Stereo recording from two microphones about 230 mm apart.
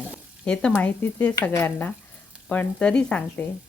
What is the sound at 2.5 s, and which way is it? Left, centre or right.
Speech, centre.